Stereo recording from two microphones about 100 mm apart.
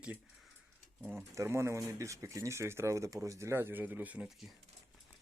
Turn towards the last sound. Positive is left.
turn(degrees=0)  # may be behind; listen again after turning